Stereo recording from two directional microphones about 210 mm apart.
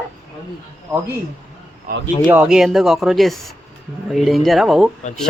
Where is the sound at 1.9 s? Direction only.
45° right (ahead or behind).